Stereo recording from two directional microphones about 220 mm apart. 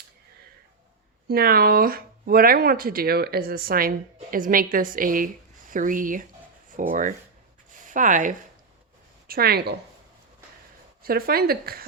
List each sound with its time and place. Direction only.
1.3 s speech: 45° right (ahead or behind)
11.0 s speech: 45° right (ahead or behind)